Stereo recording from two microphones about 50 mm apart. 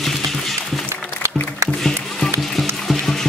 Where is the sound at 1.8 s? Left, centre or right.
Centre.